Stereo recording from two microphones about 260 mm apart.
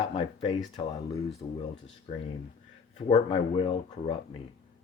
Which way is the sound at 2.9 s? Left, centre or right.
Left.